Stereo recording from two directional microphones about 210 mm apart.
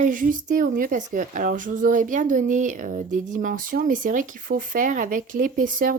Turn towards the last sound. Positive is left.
turn(degrees=-40)  # may be behind; listen again after turning